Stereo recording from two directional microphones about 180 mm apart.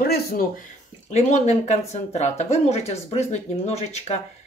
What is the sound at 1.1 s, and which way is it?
Speech, 40° left (ahead or behind).